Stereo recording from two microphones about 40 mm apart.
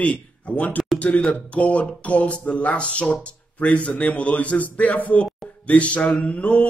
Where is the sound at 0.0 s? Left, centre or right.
Left.